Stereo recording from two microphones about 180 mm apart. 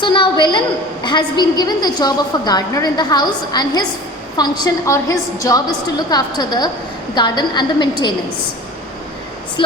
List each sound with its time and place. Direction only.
0.0 s a sound: 25° left (ahead or behind)
1.4 s a woman's voice: 25° left (ahead or behind)
9.6 s a woman's voice: 25° left (ahead or behind)